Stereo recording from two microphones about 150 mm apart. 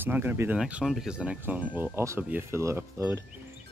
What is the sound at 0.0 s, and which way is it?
Speech, 15° right (ahead or behind).